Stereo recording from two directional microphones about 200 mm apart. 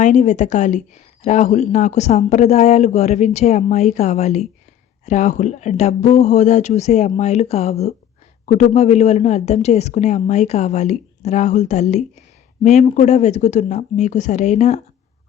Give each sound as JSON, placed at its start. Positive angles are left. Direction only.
{"t": 0.0, "sound": "speech", "side_deg": 35}